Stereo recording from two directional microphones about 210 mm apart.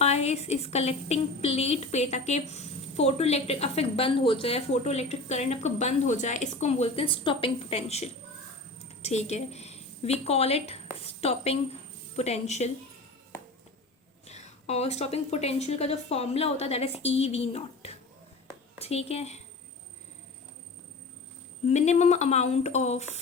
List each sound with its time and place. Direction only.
0.0 s a woman's voice: 30° left (ahead or behind)
14.3 s a woman's voice: 30° left (ahead or behind)
21.7 s a woman's voice: 30° left (ahead or behind)